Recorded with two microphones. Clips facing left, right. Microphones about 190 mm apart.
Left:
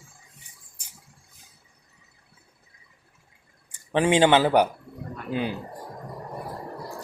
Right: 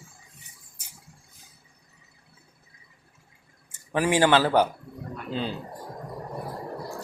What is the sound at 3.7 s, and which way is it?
Speech, 25° left (ahead or behind).